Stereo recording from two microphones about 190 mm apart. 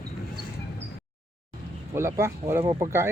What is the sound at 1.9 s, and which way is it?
Speech, 15° right (ahead or behind).